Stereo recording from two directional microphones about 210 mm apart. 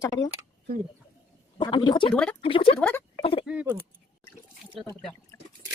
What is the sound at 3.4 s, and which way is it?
Speech, 5° right (ahead or behind).